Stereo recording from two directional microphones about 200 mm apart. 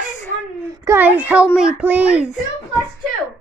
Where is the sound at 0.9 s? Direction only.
10° right (ahead or behind).